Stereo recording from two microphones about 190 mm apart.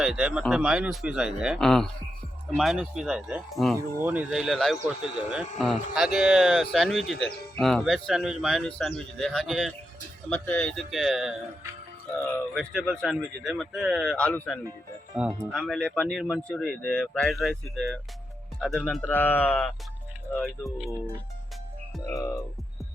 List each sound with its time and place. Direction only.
0.0 s speech: 5° right (ahead or behind)
10.2 s speech: 10° left (ahead or behind)
12.5 s speech: 5° left (ahead or behind)
22.1 s speech: 15° left (ahead or behind)